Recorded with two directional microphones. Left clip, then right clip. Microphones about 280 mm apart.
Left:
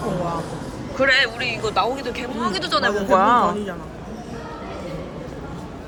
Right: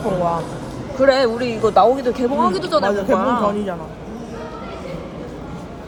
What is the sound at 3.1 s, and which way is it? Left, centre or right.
Speech, centre.